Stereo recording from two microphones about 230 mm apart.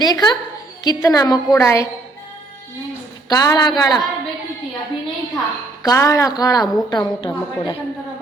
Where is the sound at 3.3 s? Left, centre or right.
Centre.